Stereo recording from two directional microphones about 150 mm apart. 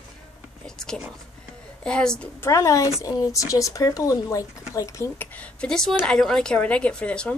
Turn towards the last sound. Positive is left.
turn(degrees=10)  # may be behind; listen again after turning